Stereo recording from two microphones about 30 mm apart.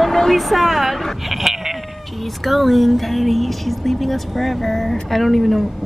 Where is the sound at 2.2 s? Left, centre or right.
Centre.